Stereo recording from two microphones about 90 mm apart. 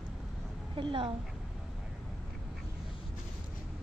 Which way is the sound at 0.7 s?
75° right (ahead or behind).